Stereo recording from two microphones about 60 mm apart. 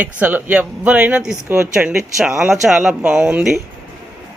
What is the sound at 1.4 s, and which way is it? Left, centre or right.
Speech, right.